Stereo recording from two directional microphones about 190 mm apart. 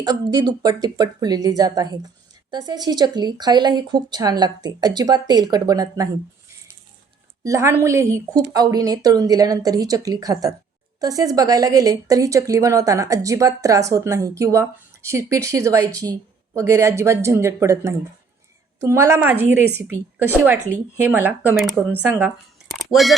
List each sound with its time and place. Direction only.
0.0 s speech: 20° right (ahead or behind)
7.4 s a woman's voice: 15° right (ahead or behind)
22.7 s speech: centre (ahead or behind)